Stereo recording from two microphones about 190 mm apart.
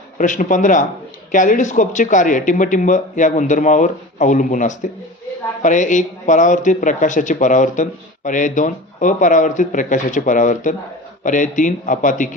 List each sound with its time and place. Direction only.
0.2 s speech: 45° left (ahead or behind)